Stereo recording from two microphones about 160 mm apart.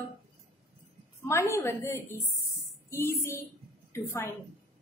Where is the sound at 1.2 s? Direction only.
15° left (ahead or behind).